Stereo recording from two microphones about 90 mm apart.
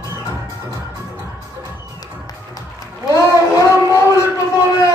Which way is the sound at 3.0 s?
40° left (ahead or behind).